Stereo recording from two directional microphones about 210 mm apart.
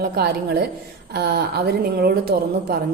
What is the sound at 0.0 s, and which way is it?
A woman's voice, 50° right (ahead or behind).